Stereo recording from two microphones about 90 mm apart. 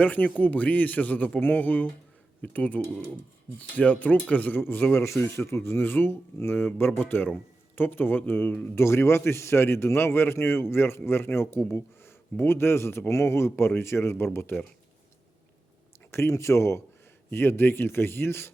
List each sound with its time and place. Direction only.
0.0 s a man's voice: 15° left (ahead or behind)
16.1 s a man's voice: 30° left (ahead or behind)